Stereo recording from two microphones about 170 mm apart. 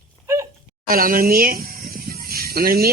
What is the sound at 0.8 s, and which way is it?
Speech, 55° right (ahead or behind).